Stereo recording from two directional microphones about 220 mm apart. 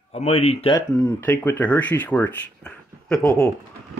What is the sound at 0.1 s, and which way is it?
Speech, 30° left (ahead or behind).